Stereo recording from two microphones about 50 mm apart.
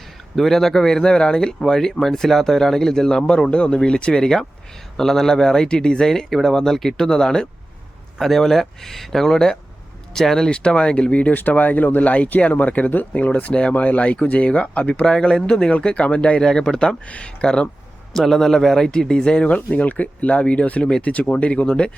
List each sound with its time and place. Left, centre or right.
0.3 s speech: centre; by 11.3 s left
11.3 s speech: left
15.0 s speech: centre